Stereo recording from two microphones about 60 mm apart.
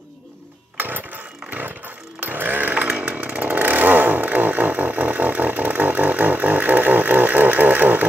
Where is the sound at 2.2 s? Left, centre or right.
Right.